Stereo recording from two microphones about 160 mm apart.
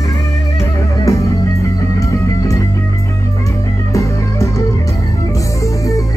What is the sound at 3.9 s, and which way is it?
Music, 20° left (ahead or behind).